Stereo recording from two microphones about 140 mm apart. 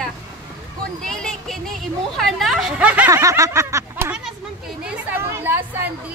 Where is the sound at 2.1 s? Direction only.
Centre (ahead or behind).